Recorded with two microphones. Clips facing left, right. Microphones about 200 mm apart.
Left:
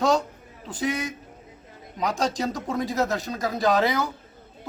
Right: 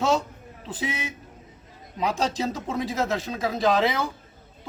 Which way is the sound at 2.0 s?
5° right (ahead or behind).